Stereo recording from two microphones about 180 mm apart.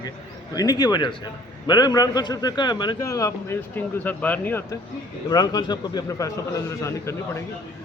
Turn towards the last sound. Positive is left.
turn(degrees=15)  # may be behind; listen again after turning